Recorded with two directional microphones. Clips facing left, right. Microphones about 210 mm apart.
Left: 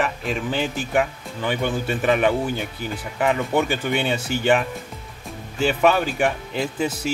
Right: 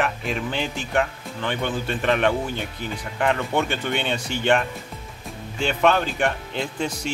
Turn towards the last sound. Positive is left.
turn(degrees=5)  # may be behind; listen again after turning